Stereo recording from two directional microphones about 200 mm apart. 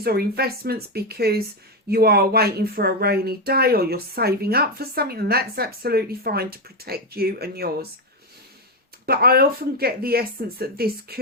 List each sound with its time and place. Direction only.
0.0 s speech: 50° right (ahead or behind)
9.0 s speech: 50° right (ahead or behind)